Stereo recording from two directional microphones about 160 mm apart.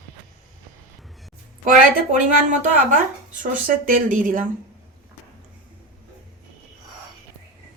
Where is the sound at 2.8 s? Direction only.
55° right (ahead or behind).